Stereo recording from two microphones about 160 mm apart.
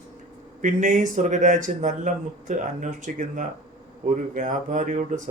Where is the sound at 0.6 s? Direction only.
55° right (ahead or behind).